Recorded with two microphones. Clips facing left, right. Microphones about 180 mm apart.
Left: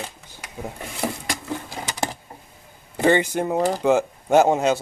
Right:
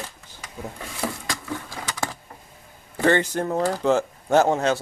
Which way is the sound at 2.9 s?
15° left (ahead or behind).